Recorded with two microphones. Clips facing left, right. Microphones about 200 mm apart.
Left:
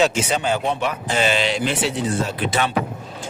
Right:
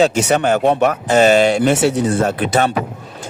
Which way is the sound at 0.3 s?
60° right (ahead or behind).